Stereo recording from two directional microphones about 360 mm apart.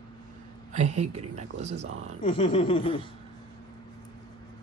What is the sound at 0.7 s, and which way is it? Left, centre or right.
Speech, centre.